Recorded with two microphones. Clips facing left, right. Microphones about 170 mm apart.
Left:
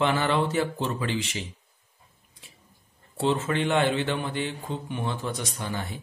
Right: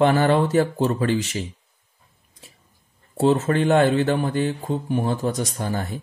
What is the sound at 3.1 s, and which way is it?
Speech, 40° right (ahead or behind).